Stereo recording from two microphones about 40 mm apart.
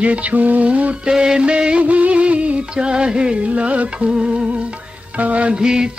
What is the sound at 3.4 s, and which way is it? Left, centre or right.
Music, right.